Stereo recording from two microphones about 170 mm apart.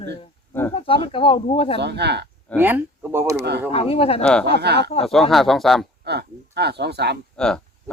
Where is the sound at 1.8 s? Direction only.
80° right.